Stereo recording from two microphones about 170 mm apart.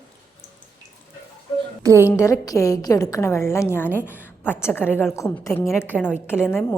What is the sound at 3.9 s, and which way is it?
Speech, 10° right (ahead or behind).